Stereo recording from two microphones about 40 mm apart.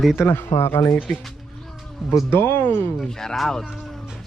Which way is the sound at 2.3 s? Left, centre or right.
Left.